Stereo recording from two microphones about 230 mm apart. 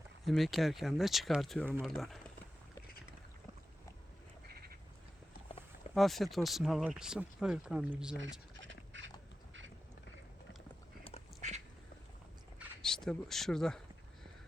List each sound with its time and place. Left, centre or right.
0.3 s speech: centre
4.4 s a sound: right
5.9 s speech: centre
8.6 s a sound: right
9.5 s clip-clop: right
12.5 s speech: centre